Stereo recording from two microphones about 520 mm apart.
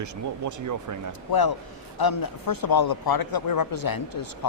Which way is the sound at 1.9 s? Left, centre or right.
Left.